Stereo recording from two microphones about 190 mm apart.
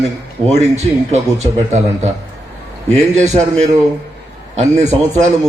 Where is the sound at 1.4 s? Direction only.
35° right (ahead or behind).